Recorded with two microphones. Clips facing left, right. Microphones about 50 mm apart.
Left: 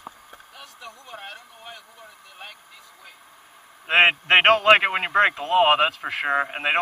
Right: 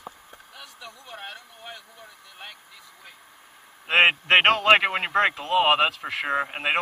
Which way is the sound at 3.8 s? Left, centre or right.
Centre.